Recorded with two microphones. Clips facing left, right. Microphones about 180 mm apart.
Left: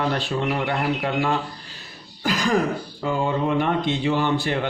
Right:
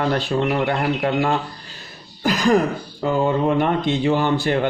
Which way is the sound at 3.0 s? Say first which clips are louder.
Right 5 dB; 45° right (ahead or behind).